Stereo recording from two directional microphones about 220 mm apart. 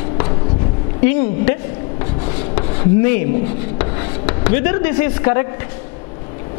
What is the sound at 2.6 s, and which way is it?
Speech, 15° left (ahead or behind).